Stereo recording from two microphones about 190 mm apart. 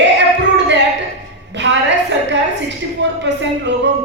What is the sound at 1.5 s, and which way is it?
Speech, 70° right (ahead or behind).